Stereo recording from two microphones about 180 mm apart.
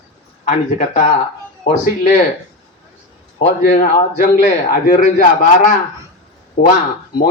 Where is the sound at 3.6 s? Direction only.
40° left (ahead or behind).